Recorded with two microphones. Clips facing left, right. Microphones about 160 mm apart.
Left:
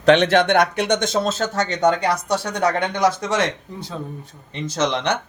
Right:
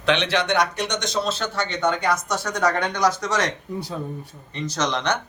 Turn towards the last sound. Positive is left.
turn(degrees=25)  # may be behind; listen again after turning